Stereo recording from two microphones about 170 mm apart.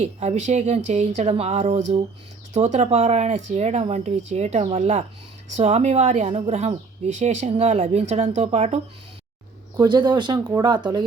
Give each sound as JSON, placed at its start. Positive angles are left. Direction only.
{"t": 0.0, "sound": "speech", "side_deg": -40}
{"t": 9.8, "sound": "speech", "side_deg": -25}